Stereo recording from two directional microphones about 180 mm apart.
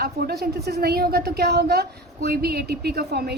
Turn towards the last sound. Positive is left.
turn(degrees=-65)  # may be behind; listen again after turning